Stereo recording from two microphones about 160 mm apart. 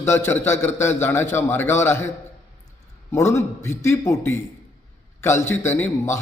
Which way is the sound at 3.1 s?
15° left (ahead or behind).